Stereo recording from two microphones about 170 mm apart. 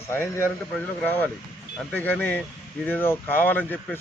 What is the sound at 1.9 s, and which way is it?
A man's voice, 10° left (ahead or behind).